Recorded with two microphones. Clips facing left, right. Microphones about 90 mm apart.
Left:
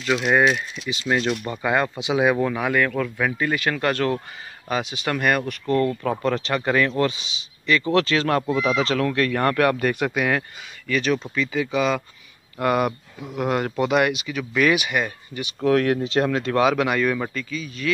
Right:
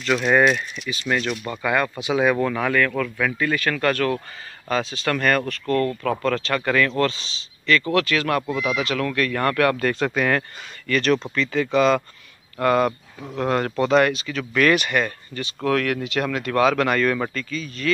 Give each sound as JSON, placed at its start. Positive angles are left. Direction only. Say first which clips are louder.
{"t": 0.0, "sound": "speech", "louder": "right 1 dB", "side_deg": 10}
{"t": 0.8, "sound": "speech", "louder": "left 2 dB", "side_deg": 20}
{"t": 12.5, "sound": "speech", "louder": "right 2 dB", "side_deg": 15}